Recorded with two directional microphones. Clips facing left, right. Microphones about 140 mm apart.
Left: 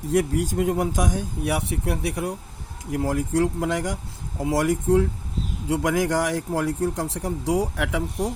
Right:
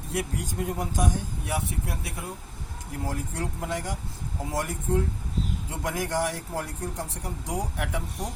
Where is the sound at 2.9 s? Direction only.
90° left.